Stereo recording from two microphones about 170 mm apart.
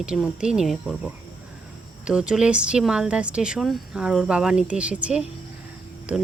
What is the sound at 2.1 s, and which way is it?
Speech, 5° right (ahead or behind).